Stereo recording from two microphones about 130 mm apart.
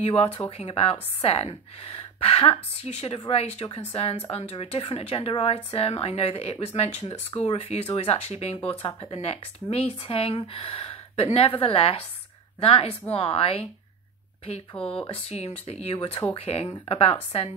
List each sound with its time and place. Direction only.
0.0 s speech: 50° left (ahead or behind)
14.8 s speech: 5° left (ahead or behind)
15.0 s speech: 50° left (ahead or behind)